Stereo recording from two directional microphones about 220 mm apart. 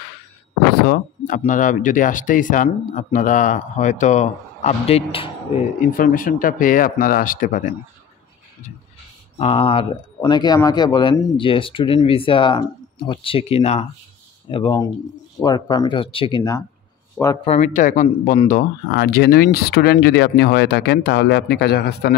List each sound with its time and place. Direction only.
0.8 s speech: 40° left (ahead or behind)
9.4 s speech: 25° left (ahead or behind)
17.2 s speech: 5° left (ahead or behind)
17.5 s speech: 35° left (ahead or behind)